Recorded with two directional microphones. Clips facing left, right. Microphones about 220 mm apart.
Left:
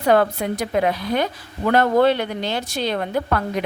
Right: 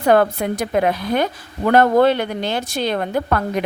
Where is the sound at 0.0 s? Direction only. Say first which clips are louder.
Right 2 dB; 50° right (ahead or behind).